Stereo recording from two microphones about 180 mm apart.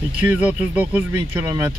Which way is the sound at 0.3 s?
10° right (ahead or behind).